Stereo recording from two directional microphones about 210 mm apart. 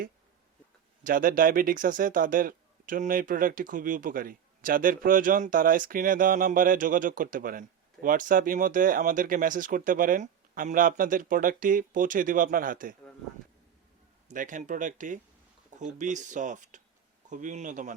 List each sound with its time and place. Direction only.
1.0 s speech: 40° right (ahead or behind)
14.3 s speech: 40° right (ahead or behind)